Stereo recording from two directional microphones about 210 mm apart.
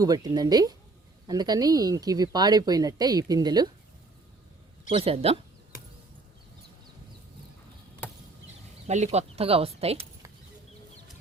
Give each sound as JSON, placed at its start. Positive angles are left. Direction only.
{"t": 0.0, "sound": "speech", "side_deg": -20}
{"t": 4.9, "sound": "speech", "side_deg": -25}
{"t": 9.1, "sound": "speech", "side_deg": -30}